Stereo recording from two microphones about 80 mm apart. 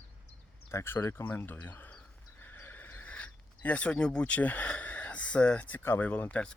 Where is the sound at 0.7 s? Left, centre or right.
Left.